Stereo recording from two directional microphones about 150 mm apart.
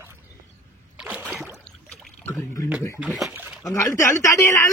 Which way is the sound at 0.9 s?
5° right (ahead or behind).